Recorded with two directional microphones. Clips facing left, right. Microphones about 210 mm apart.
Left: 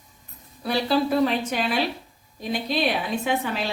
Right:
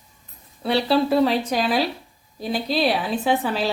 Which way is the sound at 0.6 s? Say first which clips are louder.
Right 3 dB; 30° right (ahead or behind).